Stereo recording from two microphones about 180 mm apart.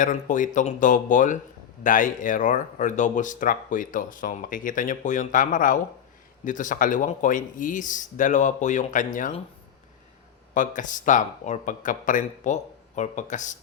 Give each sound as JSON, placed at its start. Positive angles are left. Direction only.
{"t": 0.0, "sound": "speech", "side_deg": 45}
{"t": 10.5, "sound": "speech", "side_deg": 45}